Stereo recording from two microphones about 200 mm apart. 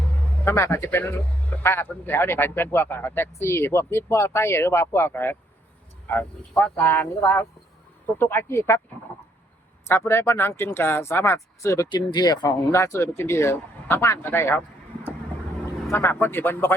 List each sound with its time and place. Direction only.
0.4 s a man's voice: 15° left (ahead or behind)
9.8 s a man's voice: 10° left (ahead or behind)
15.9 s a man's voice: 10° left (ahead or behind)